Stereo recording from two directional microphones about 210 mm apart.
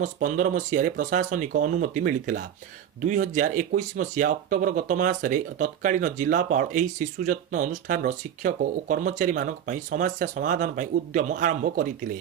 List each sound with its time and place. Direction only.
0.0 s speech: 40° right (ahead or behind)